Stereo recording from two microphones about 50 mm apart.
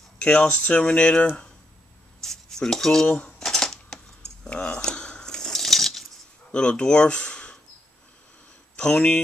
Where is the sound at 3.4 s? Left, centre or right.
Centre.